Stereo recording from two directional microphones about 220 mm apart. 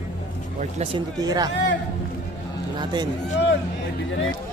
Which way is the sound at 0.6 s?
30° right (ahead or behind).